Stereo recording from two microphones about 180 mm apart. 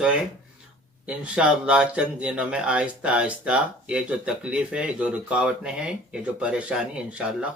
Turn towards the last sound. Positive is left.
turn(degrees=-5)  # may be behind; listen again after turning